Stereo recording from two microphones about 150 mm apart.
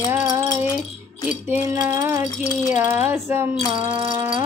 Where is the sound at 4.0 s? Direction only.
35° right (ahead or behind).